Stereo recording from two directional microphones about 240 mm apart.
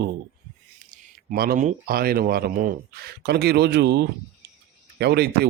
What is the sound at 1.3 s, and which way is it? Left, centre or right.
Speech, right.